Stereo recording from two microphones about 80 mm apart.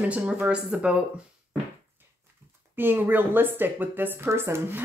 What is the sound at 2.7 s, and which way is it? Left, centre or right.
Speech, right.